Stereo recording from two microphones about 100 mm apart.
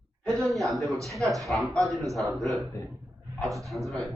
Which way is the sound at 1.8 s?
35° right (ahead or behind).